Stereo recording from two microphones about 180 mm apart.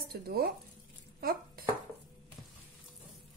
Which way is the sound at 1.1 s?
55° right (ahead or behind).